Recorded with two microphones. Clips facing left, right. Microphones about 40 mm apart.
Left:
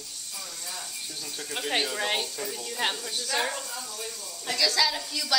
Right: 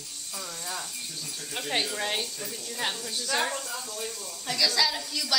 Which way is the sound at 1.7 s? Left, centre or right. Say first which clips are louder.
Left 1 dB; centre.